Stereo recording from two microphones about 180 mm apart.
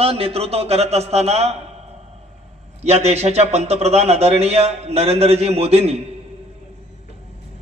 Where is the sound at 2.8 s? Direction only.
35° right (ahead or behind).